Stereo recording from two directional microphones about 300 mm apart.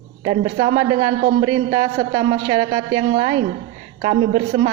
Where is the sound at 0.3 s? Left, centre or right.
Centre.